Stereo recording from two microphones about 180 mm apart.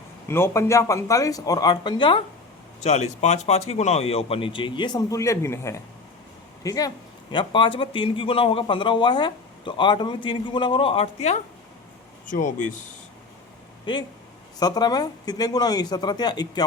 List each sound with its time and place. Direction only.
0.3 s speech: 15° left (ahead or behind)
2.8 s a man's voice: 40° left (ahead or behind)
14.6 s a man's voice: 20° left (ahead or behind)